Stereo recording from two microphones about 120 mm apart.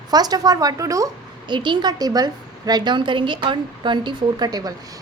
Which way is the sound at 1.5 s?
40° right (ahead or behind).